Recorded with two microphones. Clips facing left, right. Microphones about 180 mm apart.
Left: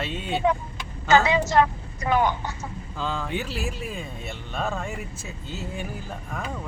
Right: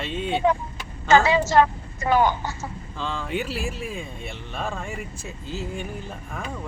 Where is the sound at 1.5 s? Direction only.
40° right (ahead or behind).